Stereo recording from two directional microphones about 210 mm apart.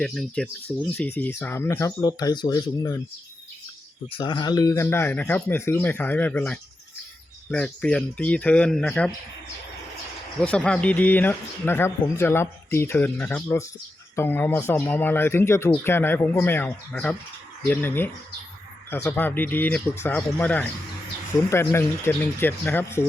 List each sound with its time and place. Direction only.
0.0 s speech: centre (ahead or behind); by 3.0 s 15° left (ahead or behind)
4.1 s speech: 20° left (ahead or behind); by 9.1 s 5° left (ahead or behind)
10.4 s speech: 5° left (ahead or behind)